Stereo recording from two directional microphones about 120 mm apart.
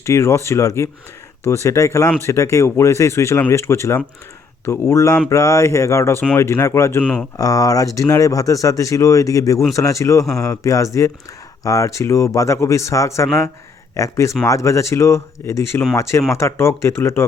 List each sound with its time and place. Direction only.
0.0 s speech: 25° left (ahead or behind)